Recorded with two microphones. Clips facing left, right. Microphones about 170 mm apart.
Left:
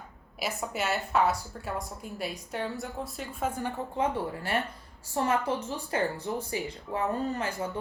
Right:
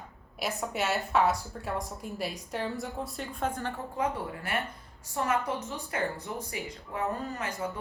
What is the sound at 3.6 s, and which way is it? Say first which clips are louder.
Speech: left 2 dB; 15° left (ahead or behind).